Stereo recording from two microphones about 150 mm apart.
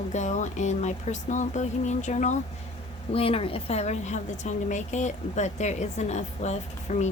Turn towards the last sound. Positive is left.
turn(degrees=50)  # may be behind; listen again after turning